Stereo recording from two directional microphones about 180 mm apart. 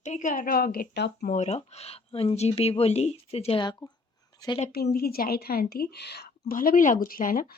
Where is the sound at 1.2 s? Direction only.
45° left (ahead or behind); by 4.6 s 25° left (ahead or behind).